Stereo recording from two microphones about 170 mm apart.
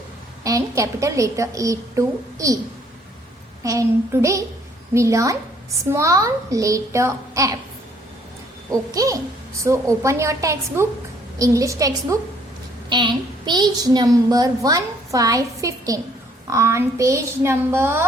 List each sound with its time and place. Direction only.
0.4 s a child's voice: 20° right (ahead or behind)
3.6 s a child's voice: 20° right (ahead or behind)
8.7 s a child's voice: 20° right (ahead or behind)